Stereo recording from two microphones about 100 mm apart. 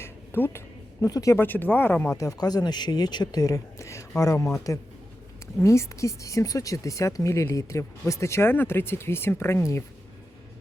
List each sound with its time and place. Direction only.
0.0 s a sound: 25° left (ahead or behind)
1.0 s speech: 35° left (ahead or behind)
1.4 s a woman's voice: 20° left (ahead or behind)
2.1 s a woman's voice: 40° left (ahead or behind)